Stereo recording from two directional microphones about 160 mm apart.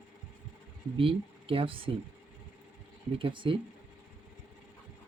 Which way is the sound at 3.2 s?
30° right (ahead or behind).